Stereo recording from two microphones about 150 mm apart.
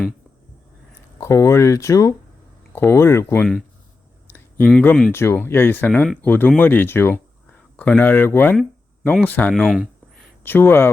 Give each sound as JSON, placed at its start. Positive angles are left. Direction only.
{"t": 1.2, "sound": "speech", "side_deg": 20}
{"t": 9.6, "sound": "speech", "side_deg": -5}
{"t": 10.4, "sound": "speech", "side_deg": 15}